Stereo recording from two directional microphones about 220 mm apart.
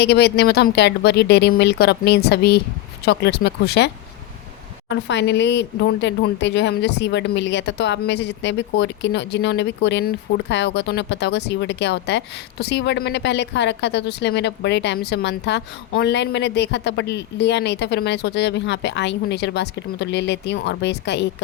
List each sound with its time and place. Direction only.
0.0 s speech: 50° left (ahead or behind)